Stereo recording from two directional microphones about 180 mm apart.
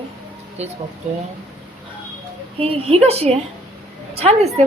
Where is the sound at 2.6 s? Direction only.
35° right (ahead or behind).